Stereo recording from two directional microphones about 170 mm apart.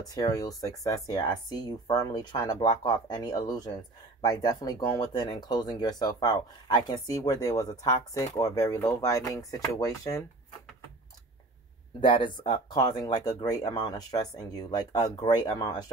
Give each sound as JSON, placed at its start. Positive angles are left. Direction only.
{"t": 0.0, "sound": "speech", "side_deg": 20}
{"t": 12.0, "sound": "speech", "side_deg": 30}